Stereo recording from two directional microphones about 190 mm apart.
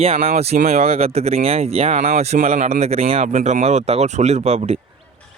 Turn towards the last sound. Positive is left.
turn(degrees=-35)  # may be behind; listen again after turning